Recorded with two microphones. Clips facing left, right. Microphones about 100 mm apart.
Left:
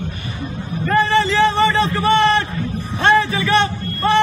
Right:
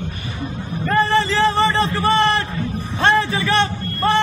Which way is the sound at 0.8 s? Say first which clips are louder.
Left 1 dB; 35° right (ahead or behind).